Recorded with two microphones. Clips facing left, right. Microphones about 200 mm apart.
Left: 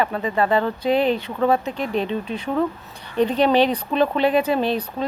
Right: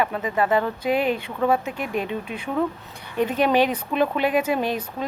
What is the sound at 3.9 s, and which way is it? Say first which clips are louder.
Speech: left 2 dB; 10° right (ahead or behind).